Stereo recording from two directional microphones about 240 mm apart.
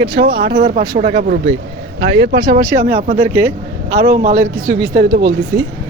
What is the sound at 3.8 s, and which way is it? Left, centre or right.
Speech, right.